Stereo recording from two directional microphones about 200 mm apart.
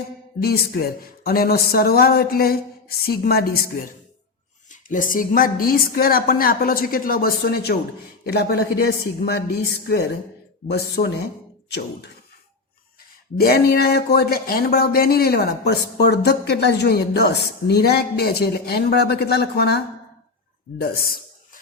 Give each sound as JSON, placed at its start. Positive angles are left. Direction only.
{"t": 0.4, "sound": "speech", "side_deg": 50}
{"t": 4.7, "sound": "speech", "side_deg": 40}
{"t": 13.4, "sound": "speech", "side_deg": 50}
{"t": 20.7, "sound": "a sound", "side_deg": 50}